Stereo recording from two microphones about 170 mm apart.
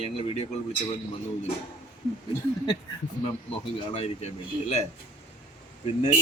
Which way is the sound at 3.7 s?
40° left (ahead or behind).